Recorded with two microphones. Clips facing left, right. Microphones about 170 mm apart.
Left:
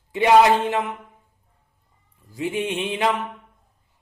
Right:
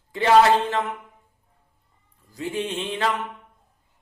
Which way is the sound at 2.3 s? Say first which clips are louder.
Left 3 dB; 15° left (ahead or behind).